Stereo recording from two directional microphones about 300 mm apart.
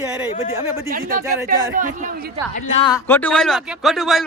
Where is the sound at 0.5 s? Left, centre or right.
Centre.